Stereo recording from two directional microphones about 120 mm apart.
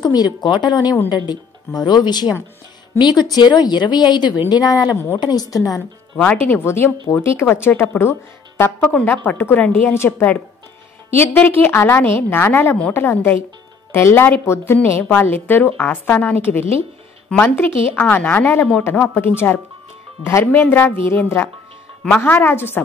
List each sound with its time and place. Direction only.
0.0 s a woman's voice: 35° left (ahead or behind)
5.8 s a woman's voice: 10° left (ahead or behind)